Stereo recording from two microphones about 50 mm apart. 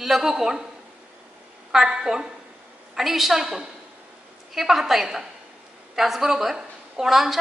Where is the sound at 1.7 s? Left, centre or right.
Centre.